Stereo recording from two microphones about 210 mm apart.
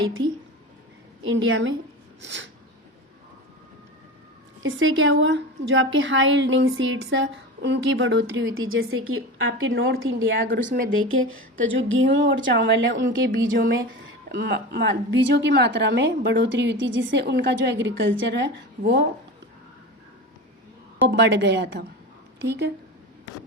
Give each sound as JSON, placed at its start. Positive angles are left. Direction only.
{"t": 1.5, "sound": "a woman's voice", "side_deg": -60}
{"t": 4.6, "sound": "a woman's voice", "side_deg": -65}
{"t": 8.9, "sound": "a woman's voice", "side_deg": -85}
{"t": 10.7, "sound": "speech", "side_deg": -40}
{"t": 11.1, "sound": "a woman's voice", "side_deg": -75}
{"t": 21.1, "sound": "a woman's voice", "side_deg": -55}